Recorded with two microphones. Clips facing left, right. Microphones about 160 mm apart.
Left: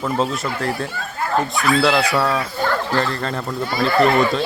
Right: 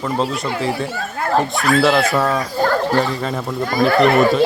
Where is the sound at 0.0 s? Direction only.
Centre (ahead or behind).